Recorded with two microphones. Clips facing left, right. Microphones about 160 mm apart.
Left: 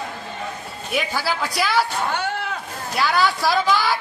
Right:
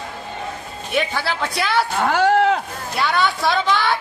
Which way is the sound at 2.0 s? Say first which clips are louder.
Right 9 dB; 80° right.